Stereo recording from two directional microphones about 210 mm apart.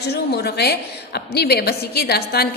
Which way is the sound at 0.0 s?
50° left (ahead or behind).